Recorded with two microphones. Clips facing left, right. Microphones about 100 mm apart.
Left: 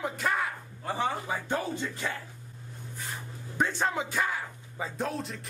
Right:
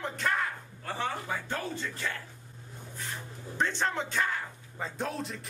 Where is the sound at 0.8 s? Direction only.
15° left (ahead or behind).